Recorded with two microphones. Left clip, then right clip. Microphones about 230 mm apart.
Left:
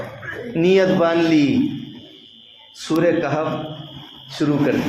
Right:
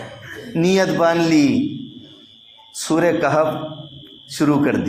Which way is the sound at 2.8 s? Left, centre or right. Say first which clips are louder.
Right 1 dB; right.